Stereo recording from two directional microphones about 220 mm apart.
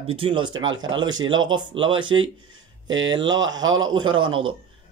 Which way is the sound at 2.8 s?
60° right (ahead or behind).